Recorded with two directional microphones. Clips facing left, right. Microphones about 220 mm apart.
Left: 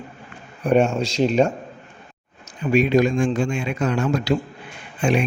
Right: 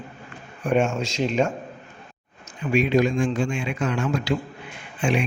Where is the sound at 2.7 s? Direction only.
40° left (ahead or behind).